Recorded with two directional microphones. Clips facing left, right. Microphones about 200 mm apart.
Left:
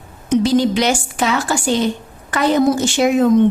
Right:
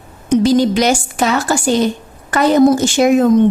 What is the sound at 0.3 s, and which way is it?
A woman's voice, 45° right (ahead or behind).